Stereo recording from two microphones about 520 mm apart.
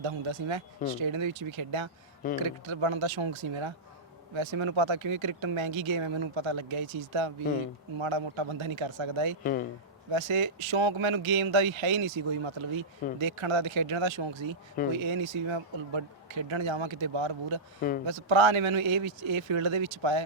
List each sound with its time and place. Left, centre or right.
0.0 s speech: right
9.4 s speech: centre
10.1 s speech: right